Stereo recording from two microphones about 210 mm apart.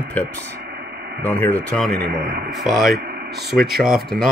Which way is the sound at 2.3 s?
50° right (ahead or behind).